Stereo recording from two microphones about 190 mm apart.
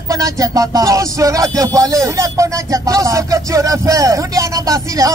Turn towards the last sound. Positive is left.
turn(degrees=-20)  # may be behind; listen again after turning